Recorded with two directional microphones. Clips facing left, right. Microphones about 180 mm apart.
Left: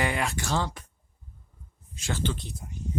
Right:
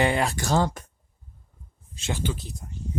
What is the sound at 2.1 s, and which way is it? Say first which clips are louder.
Speech: right 1 dB; 10° right (ahead or behind).